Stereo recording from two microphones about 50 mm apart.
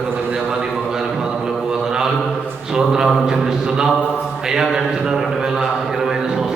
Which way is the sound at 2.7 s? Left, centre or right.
Centre.